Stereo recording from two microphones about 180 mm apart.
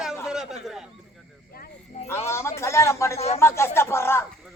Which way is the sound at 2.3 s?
15° left (ahead or behind).